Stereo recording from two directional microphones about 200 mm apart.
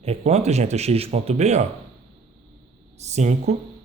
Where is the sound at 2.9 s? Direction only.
35° right (ahead or behind).